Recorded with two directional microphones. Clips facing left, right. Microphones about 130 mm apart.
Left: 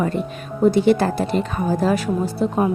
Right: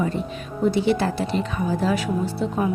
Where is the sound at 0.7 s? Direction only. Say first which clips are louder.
Left 4 dB; 45° left (ahead or behind).